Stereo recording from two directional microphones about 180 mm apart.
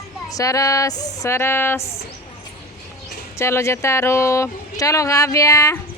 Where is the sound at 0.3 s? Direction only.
20° left (ahead or behind).